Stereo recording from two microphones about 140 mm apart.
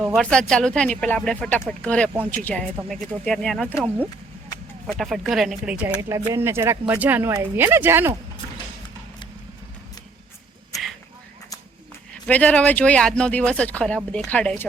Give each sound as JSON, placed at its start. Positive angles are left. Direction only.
{"t": 0.2, "sound": "speech", "side_deg": 5}
{"t": 3.7, "sound": "speech", "side_deg": -10}
{"t": 4.9, "sound": "speech", "side_deg": 0}
{"t": 6.0, "sound": "speech", "side_deg": -20}
{"t": 12.1, "sound": "speech", "side_deg": 10}